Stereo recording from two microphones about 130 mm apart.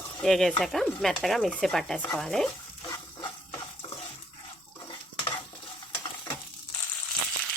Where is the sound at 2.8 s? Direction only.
25° left (ahead or behind).